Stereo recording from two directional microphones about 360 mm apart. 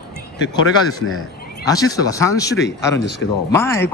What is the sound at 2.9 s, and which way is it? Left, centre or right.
Speech, left.